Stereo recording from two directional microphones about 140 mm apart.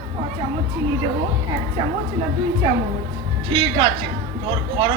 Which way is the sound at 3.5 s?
40° right (ahead or behind).